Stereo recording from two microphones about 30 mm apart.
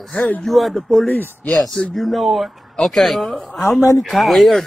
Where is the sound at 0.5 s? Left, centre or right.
Centre.